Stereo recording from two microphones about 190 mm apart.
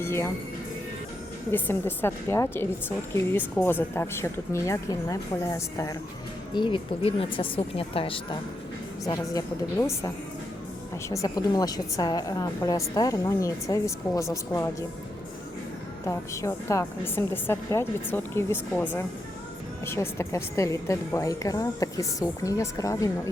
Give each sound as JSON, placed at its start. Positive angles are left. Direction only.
{"t": 0.0, "sound": "a woman's voice", "side_deg": 15}
{"t": 1.5, "sound": "a woman's voice", "side_deg": 10}
{"t": 9.3, "sound": "a woman's voice", "side_deg": 15}
{"t": 11.1, "sound": "a woman's voice", "side_deg": 20}
{"t": 16.0, "sound": "a woman's voice", "side_deg": 15}